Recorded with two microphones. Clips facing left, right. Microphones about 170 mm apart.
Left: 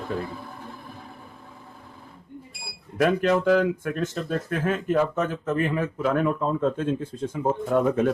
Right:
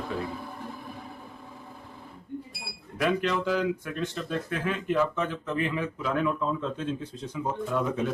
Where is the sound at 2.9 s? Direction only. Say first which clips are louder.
Left 6 dB; 45° left (ahead or behind).